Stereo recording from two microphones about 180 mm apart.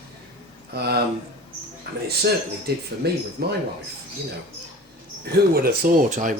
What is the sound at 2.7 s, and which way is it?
Speech, 60° right (ahead or behind).